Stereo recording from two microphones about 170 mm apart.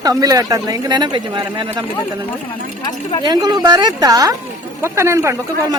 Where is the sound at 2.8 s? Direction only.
25° left (ahead or behind).